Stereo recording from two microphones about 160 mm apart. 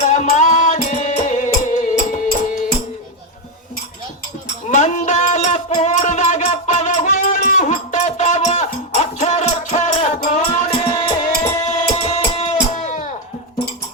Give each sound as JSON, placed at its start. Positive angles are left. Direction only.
{"t": 0.0, "sound": "music", "side_deg": 50}
{"t": 4.7, "sound": "music", "side_deg": 50}